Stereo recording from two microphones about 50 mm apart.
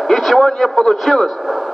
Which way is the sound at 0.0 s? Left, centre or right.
Centre.